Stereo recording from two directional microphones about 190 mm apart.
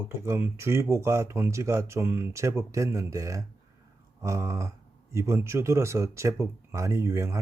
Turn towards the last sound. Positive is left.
turn(degrees=-15)  # may be behind; listen again after turning